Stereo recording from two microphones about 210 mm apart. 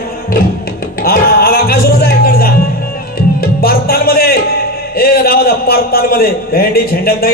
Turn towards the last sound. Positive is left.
turn(degrees=45)  # may be behind; listen again after turning